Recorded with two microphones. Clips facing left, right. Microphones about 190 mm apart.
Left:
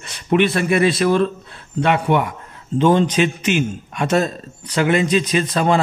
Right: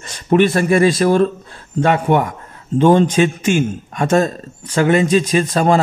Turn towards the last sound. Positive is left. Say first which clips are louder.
# right 3 dB
turn(degrees=-45)  # may be behind; listen again after turning